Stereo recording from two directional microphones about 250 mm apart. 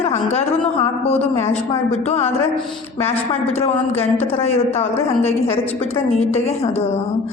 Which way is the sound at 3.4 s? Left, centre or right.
Left.